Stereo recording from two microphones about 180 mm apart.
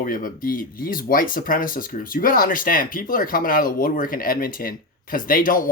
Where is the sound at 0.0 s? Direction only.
50° left (ahead or behind).